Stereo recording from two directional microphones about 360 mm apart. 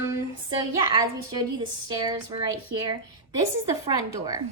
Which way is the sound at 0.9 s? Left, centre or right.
Centre.